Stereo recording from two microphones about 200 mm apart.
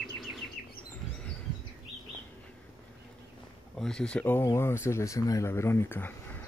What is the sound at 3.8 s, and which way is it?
Speech, 5° left (ahead or behind).